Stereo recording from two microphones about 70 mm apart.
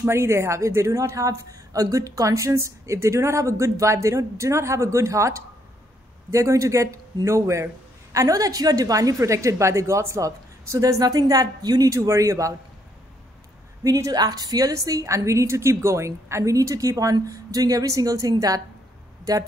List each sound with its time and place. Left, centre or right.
0.0 s a woman's voice: right
13.8 s a woman's voice: right
14.1 s a woman's voice: right